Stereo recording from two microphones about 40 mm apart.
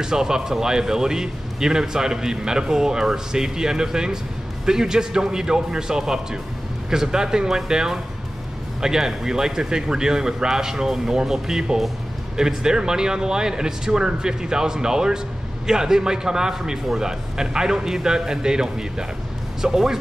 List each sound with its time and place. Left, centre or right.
0.0 s speech: centre